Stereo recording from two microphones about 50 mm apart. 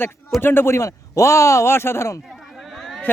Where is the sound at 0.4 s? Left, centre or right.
Left.